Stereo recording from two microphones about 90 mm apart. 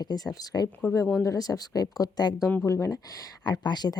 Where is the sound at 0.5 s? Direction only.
35° left (ahead or behind).